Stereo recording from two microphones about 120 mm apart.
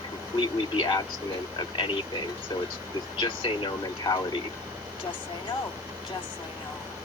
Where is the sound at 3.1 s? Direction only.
40° left (ahead or behind).